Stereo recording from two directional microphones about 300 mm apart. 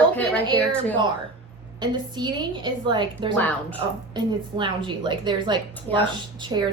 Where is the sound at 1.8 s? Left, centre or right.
Centre.